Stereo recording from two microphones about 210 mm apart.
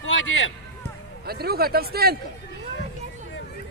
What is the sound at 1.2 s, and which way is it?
Speech, 50° right (ahead or behind).